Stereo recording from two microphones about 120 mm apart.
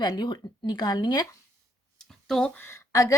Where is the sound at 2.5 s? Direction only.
20° left (ahead or behind).